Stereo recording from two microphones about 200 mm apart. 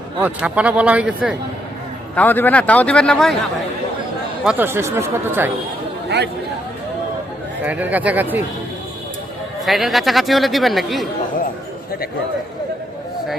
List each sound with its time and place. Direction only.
0.2 s speech: 5° right (ahead or behind)
2.1 s a man's voice: 10° left (ahead or behind)
4.4 s speech: 10° right (ahead or behind)
6.1 s chatter: 55° right (ahead or behind)
7.6 s speech: 10° right (ahead or behind)
9.6 s speech: centre (ahead or behind)